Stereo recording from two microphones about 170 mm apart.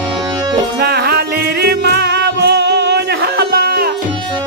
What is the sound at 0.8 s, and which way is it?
Music, 70° right (ahead or behind).